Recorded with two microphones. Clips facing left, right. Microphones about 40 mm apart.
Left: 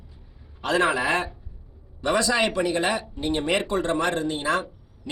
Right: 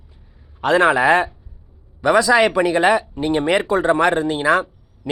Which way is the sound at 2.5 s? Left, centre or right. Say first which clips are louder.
Right 7 dB; right.